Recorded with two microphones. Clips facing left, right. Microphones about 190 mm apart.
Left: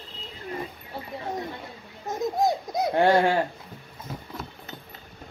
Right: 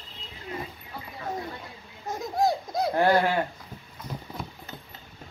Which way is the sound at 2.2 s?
20° left (ahead or behind).